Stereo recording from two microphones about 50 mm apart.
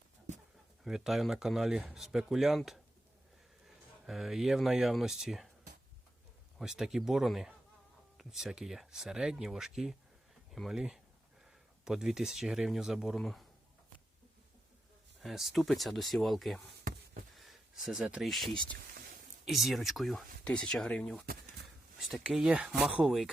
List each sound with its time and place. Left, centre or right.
0.9 s speech: centre
4.0 s speech: centre
6.6 s speech: centre
13.1 s speech: centre
15.2 s speech: centre
17.3 s a sound: centre
18.2 s speech: centre
20.4 s speech: centre
22.4 s speech: right
23.0 s speech: centre